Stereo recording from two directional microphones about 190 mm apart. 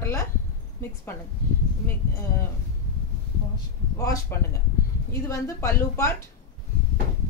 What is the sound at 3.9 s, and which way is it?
A woman's voice, 15° left (ahead or behind).